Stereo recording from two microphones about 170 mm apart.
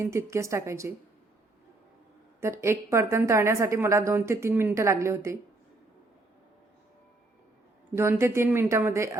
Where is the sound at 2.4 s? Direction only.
15° right (ahead or behind).